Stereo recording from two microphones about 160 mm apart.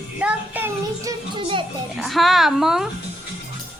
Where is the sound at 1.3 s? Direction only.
30° right (ahead or behind).